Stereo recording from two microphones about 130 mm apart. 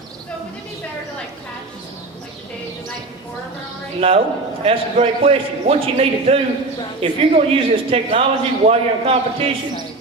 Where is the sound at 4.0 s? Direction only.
50° right (ahead or behind).